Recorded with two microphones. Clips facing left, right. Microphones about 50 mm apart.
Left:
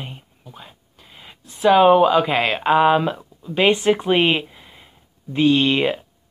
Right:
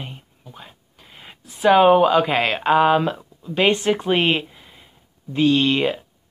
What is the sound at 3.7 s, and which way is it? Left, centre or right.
A woman's voice, centre.